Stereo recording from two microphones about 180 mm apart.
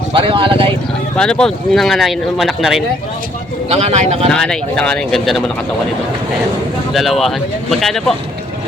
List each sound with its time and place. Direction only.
0.1 s speech: 30° right (ahead or behind)
1.1 s speech: 5° left (ahead or behind)
3.7 s speech: 35° right (ahead or behind)
4.3 s speech: 5° left (ahead or behind)
6.9 s speech: centre (ahead or behind)